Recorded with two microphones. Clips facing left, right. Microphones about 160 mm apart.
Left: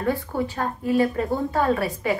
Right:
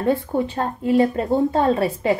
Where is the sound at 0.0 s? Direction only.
25° right (ahead or behind).